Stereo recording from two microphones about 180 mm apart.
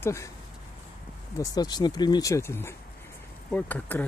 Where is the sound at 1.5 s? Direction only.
20° left (ahead or behind).